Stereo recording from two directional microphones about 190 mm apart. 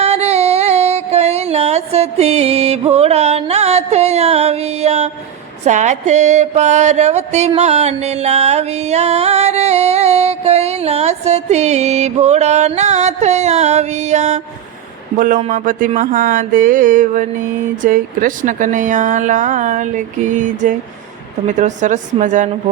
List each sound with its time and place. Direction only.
0.0 s music: 35° right (ahead or behind)
15.4 s a sound: 45° right (ahead or behind)
17.8 s music: 45° right (ahead or behind)